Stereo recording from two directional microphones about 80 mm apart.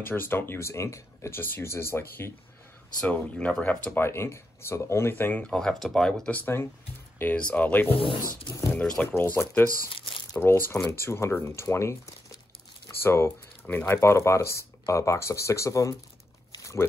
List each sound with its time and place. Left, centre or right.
0.0 s speech: left
3.0 s speech: centre
4.0 s speech: left
5.4 s speech: centre
6.3 s speech: left
8.0 s speech: left
8.7 s speech: centre
9.0 s speech: left
13.0 s speech: left